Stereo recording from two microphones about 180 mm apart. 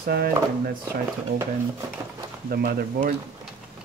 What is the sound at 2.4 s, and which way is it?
Speech, 55° right (ahead or behind).